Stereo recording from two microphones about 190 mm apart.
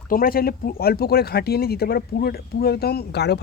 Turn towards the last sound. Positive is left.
turn(degrees=60)  # may be behind; listen again after turning